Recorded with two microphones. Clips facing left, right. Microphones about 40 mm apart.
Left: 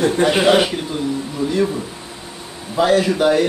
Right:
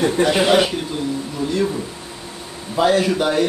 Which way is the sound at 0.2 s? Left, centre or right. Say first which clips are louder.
Left 1 dB; centre.